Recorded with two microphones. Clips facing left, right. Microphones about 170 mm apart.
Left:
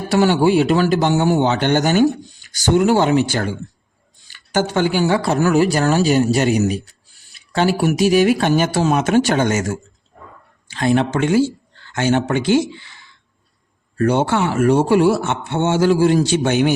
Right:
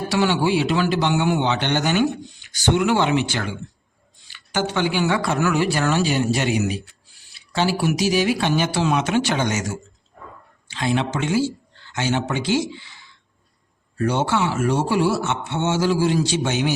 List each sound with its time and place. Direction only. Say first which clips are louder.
0.1 s a man's voice: left 6 dB; 45° left (ahead or behind)